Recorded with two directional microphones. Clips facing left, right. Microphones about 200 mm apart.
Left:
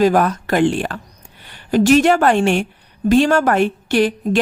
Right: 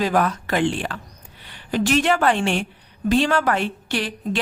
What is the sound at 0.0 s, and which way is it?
A woman's voice, 45° left (ahead or behind).